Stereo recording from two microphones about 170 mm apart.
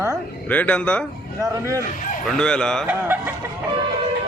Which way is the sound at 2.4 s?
5° left (ahead or behind).